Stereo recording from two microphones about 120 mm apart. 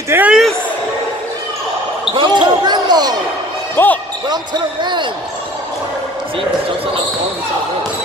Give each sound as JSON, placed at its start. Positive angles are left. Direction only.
{"t": 0.1, "sound": "speech", "side_deg": -15}
{"t": 2.1, "sound": "basketball bounce", "side_deg": -40}
{"t": 3.7, "sound": "speech", "side_deg": 15}